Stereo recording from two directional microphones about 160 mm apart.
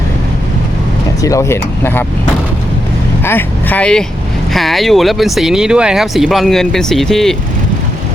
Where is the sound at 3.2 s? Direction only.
10° left (ahead or behind).